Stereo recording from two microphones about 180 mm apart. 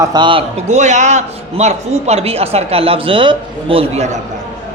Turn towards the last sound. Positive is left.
turn(degrees=-40)  # may be behind; listen again after turning